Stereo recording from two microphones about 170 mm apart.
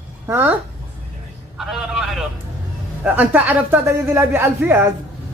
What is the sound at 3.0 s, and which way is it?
A woman's voice, 10° right (ahead or behind).